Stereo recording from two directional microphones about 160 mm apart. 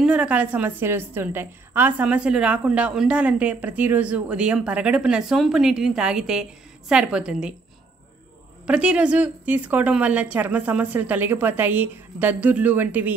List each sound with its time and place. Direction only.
0.0 s a woman's voice: 5° right (ahead or behind)
8.6 s a woman's voice: 5° right (ahead or behind)